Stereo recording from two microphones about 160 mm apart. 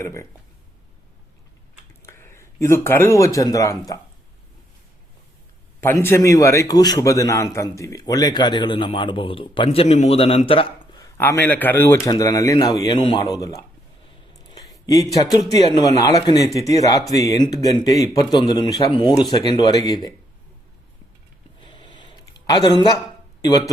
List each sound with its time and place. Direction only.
0.0 s speech: 15° left (ahead or behind)
2.0 s speech: 15° left (ahead or behind)
5.8 s a man's voice: 15° left (ahead or behind); by 9.6 s 30° left (ahead or behind)
9.6 s a man's voice: 45° left (ahead or behind)
11.0 s a man's voice: 15° left (ahead or behind)
14.3 s a sound: 20° left (ahead or behind)
15.1 s a man's voice: 20° left (ahead or behind)
21.6 s a sound: 30° left (ahead or behind)
23.4 s speech: 25° left (ahead or behind)